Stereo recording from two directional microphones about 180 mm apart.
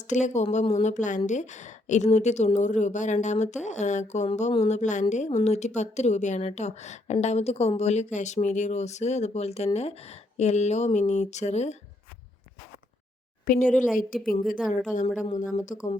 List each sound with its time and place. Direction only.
0.1 s speech: 40° left (ahead or behind)
13.7 s a woman's voice: 5° left (ahead or behind)
13.9 s speech: 50° left (ahead or behind)